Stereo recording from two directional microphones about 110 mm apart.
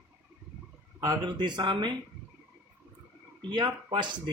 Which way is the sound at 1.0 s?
40° right (ahead or behind).